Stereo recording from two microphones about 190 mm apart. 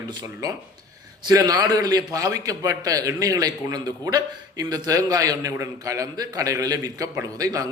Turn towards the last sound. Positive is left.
turn(degrees=-20)  # may be behind; listen again after turning